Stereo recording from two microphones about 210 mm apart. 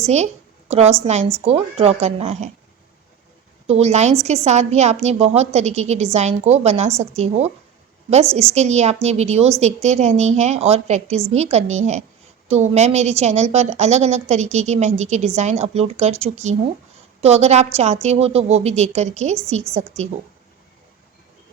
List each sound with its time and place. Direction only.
0.0 s a woman's voice: 30° right (ahead or behind)
3.7 s a woman's voice: 30° right (ahead or behind)
8.5 s a woman's voice: 30° right (ahead or behind)